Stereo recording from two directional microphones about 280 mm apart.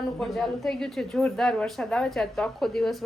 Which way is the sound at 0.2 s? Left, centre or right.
Centre.